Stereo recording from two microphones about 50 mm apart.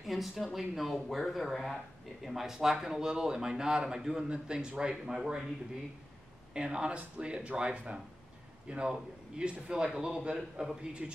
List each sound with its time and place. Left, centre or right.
0.0 s speech: centre
6.5 s a man's voice: centre